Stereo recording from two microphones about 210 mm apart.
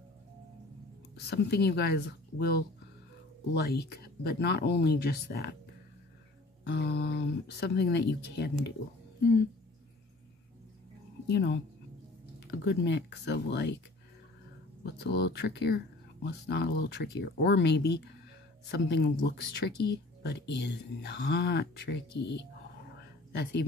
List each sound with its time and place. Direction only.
1.1 s speech: 50° left (ahead or behind)
6.6 s speech: 50° left (ahead or behind)
11.2 s speech: 50° left (ahead or behind)
12.6 s speech: 55° left (ahead or behind)
14.8 s speech: 50° left (ahead or behind)
22.9 s a sound: 50° left (ahead or behind)